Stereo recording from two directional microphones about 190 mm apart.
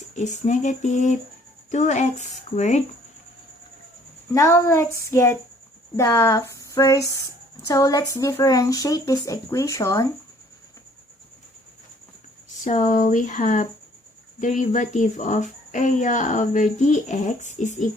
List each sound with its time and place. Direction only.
0.2 s speech: 40° left (ahead or behind)
4.4 s speech: 15° left (ahead or behind)
12.6 s speech: 40° left (ahead or behind)